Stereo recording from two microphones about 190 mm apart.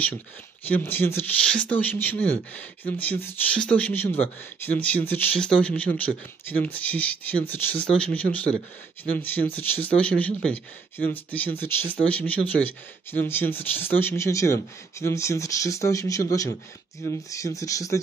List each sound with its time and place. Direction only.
0.7 s speech: 10° left (ahead or behind)